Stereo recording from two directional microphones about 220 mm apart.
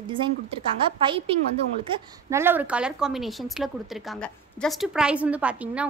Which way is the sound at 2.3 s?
10° right (ahead or behind).